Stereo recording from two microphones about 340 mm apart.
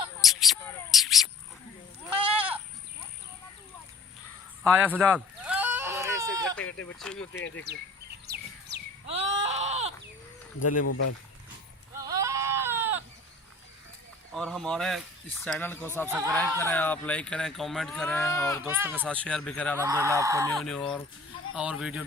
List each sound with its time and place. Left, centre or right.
0.2 s a sound: centre
4.6 s a sound: centre
6.6 s speech: centre
7.7 s speech: right
8.3 s bird: right
9.0 s a sound: centre
10.7 s speech: left
11.9 s sheep: centre
14.3 s speech: centre
16.0 s speech: centre
16.3 s speech: centre
18.6 s speech: centre
19.8 s speech: centre
20.7 s speech: centre